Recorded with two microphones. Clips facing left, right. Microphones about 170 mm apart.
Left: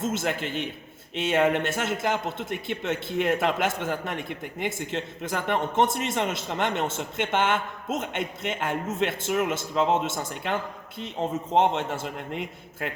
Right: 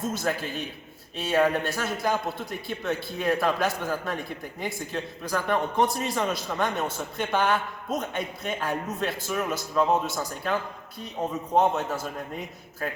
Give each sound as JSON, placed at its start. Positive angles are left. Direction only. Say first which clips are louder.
{"t": 0.0, "sound": "a man's voice", "louder": "left 1 dB", "side_deg": 25}
{"t": 11.7, "sound": "a man's voice", "louder": "even", "side_deg": 25}